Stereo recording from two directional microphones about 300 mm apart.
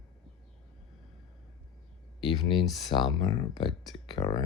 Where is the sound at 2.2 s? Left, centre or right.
Centre.